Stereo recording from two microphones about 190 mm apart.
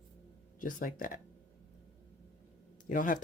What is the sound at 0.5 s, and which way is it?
Speech, 45° left (ahead or behind).